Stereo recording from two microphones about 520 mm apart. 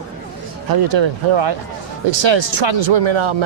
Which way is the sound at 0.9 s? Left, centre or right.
Right.